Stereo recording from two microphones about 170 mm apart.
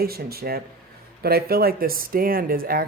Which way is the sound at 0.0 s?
65° right (ahead or behind).